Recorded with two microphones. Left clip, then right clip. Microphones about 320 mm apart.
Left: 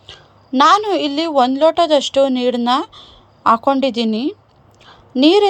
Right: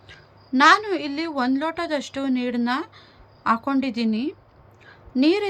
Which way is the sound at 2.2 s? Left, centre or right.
Left.